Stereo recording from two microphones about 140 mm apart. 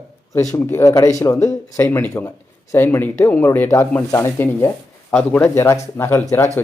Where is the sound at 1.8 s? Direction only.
10° left (ahead or behind).